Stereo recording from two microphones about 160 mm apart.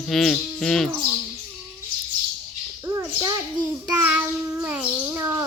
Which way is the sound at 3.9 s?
10° right (ahead or behind).